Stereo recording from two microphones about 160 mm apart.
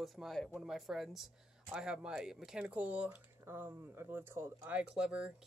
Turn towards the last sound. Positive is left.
turn(degrees=-5)  # may be behind; listen again after turning